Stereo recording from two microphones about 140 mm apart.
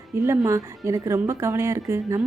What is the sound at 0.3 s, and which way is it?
A woman's voice, 20° right (ahead or behind).